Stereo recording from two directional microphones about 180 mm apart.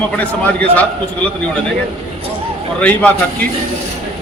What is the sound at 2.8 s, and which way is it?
Speech, 10° left (ahead or behind).